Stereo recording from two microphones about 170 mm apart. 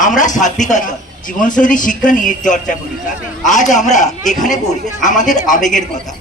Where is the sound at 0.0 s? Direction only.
45° left (ahead or behind).